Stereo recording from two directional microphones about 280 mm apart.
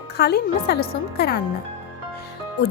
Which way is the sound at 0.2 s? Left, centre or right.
Left.